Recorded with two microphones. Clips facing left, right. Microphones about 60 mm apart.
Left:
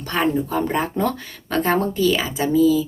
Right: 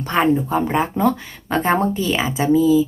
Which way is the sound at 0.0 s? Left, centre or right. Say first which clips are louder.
Right 3 dB; right.